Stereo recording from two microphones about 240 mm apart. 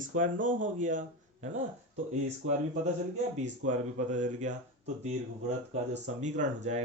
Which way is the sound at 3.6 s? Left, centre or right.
Right.